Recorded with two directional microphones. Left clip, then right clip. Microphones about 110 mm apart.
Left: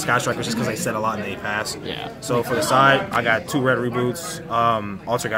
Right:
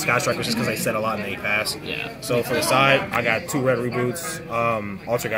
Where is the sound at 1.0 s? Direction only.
30° left (ahead or behind).